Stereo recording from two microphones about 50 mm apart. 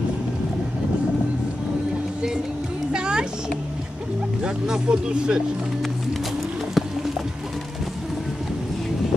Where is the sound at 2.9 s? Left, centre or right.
Centre.